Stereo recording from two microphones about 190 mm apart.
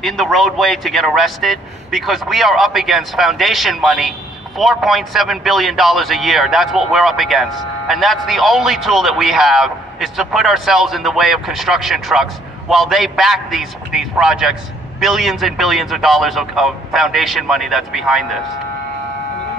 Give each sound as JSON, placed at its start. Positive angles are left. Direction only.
{"t": 0.0, "sound": "speech", "side_deg": 0}